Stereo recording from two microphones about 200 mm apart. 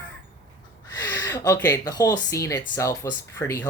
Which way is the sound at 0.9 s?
15° left (ahead or behind).